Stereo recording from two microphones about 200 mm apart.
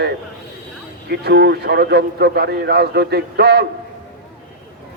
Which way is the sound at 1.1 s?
55° right (ahead or behind).